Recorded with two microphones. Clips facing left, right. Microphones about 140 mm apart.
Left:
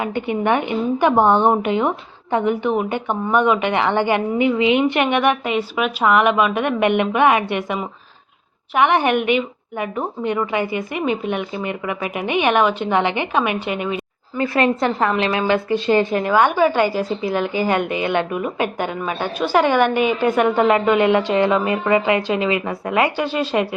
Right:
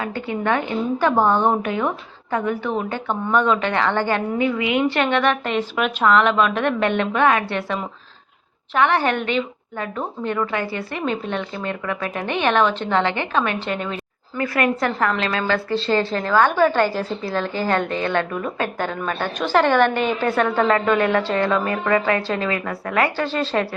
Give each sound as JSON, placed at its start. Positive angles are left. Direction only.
{"t": 0.0, "sound": "a woman's voice", "side_deg": 20}
{"t": 14.3, "sound": "a woman's voice", "side_deg": 25}